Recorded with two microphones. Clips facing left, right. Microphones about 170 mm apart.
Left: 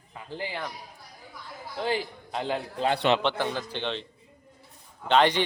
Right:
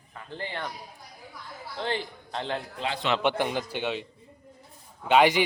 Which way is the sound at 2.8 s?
50° left (ahead or behind).